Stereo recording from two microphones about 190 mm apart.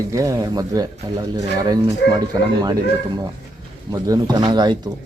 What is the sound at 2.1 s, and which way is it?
Speech, 20° right (ahead or behind).